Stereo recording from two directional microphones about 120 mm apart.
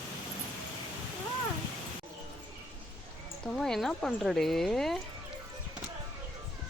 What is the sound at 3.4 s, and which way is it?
Speech, 5° left (ahead or behind).